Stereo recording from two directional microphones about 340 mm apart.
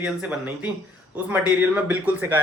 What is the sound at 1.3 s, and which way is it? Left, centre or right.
Speech, centre.